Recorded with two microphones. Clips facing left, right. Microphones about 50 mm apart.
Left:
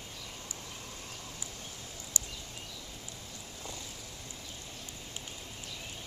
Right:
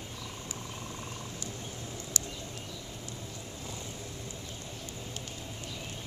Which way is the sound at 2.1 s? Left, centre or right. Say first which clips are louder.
Right 2 dB; right.